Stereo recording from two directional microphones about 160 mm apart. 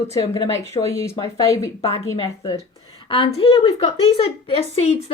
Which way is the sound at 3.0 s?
35° left (ahead or behind).